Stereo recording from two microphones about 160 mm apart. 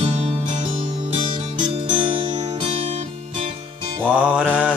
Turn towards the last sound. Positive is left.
turn(degrees=-10)  # may be behind; listen again after turning